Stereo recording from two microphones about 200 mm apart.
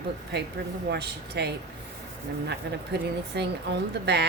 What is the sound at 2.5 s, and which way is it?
Speech, 55° right (ahead or behind).